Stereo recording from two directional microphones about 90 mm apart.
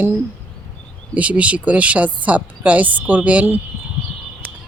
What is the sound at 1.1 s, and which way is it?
A woman's voice, 15° right (ahead or behind).